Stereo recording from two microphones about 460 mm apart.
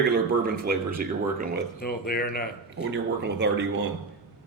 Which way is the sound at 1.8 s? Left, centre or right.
Centre.